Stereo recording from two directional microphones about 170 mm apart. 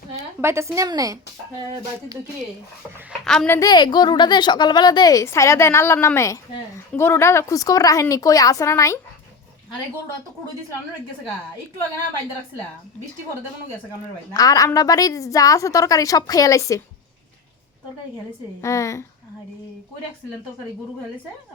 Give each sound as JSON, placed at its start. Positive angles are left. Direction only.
{"t": 0.4, "sound": "speech", "side_deg": -15}
{"t": 3.2, "sound": "speech", "side_deg": 5}
{"t": 3.5, "sound": "a woman's voice", "side_deg": 20}
{"t": 14.3, "sound": "a woman's voice", "side_deg": 20}
{"t": 18.6, "sound": "a woman's voice", "side_deg": 20}